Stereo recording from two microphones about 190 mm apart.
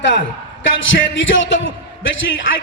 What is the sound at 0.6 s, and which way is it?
Speech, 90° left.